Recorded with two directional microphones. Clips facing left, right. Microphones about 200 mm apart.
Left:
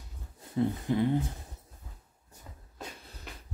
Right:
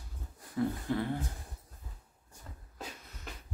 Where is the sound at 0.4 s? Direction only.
20° left (ahead or behind).